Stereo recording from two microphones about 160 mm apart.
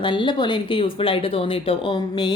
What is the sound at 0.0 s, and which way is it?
A woman's voice, 30° left (ahead or behind).